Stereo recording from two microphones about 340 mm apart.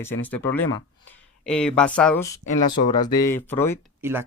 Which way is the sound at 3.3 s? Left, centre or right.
Centre.